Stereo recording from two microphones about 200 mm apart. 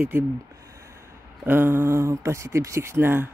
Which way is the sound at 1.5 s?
10° right (ahead or behind).